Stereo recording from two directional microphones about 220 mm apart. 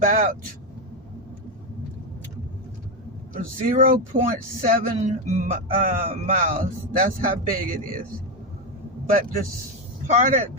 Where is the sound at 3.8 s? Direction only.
40° right (ahead or behind).